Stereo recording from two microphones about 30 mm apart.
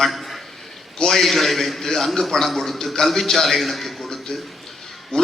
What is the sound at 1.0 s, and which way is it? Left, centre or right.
A man's voice, centre.